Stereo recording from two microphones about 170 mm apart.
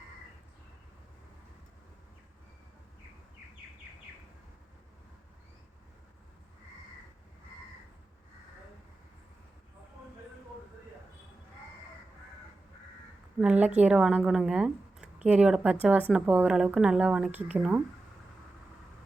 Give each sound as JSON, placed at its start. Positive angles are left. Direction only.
{"t": 13.4, "sound": "speech", "side_deg": -5}